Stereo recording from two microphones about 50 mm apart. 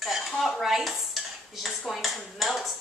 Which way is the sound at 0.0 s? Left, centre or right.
Centre.